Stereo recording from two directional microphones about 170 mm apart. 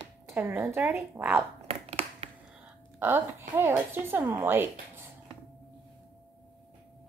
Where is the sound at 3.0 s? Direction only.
15° right (ahead or behind).